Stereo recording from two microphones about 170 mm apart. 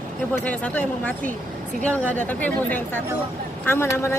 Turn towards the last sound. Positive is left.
turn(degrees=15)  # may be behind; listen again after turning